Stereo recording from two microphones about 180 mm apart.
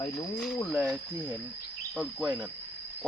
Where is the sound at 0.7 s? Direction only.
Centre (ahead or behind).